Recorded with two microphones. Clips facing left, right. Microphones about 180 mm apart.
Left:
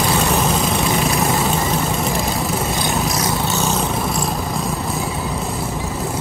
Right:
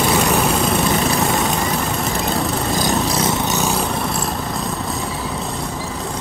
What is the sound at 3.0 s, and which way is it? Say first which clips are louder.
Lawn mower: right 1 dB; 25° right (ahead or behind).